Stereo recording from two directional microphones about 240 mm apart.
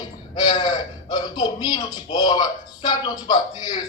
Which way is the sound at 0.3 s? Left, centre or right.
Centre.